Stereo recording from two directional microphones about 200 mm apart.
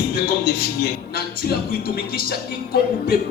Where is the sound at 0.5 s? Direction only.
50° left (ahead or behind).